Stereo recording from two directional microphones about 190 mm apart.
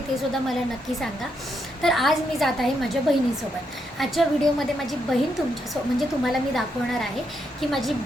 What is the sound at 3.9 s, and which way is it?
A woman's voice, centre (ahead or behind).